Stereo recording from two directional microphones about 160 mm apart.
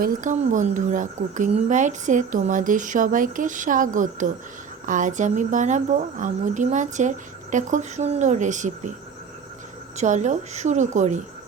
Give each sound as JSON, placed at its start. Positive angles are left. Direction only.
{"t": 0.0, "sound": "a woman's voice", "side_deg": -55}
{"t": 10.0, "sound": "a woman's voice", "side_deg": -50}